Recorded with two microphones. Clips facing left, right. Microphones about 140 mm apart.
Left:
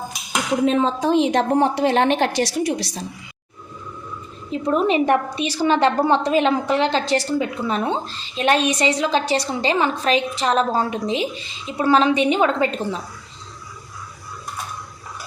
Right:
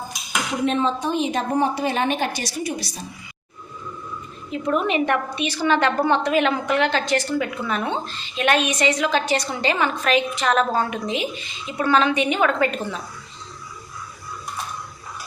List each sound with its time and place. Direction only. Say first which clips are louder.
0.9 s a woman's voice: left 5 dB; 90° left
4.5 s a woman's voice: left 3 dB; 30° left (ahead or behind)